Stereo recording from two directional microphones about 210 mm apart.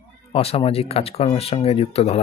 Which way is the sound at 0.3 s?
25° left (ahead or behind).